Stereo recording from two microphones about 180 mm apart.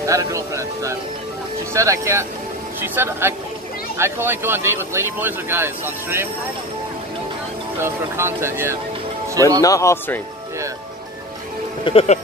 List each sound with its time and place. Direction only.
0.0 s speech: 15° right (ahead or behind)
7.8 s speech: 15° right (ahead or behind)
9.6 s a man's voice: 15° left (ahead or behind)
11.8 s speech: 35° left (ahead or behind)